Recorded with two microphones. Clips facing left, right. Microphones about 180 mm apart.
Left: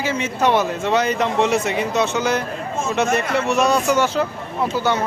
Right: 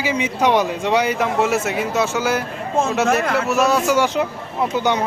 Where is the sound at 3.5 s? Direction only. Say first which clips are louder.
Left 1 dB; 5° right (ahead or behind).